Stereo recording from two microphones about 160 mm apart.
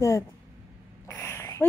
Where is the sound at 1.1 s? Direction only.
15° left (ahead or behind).